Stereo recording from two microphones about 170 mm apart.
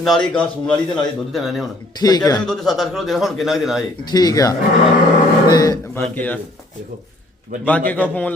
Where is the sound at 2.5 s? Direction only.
Centre (ahead or behind).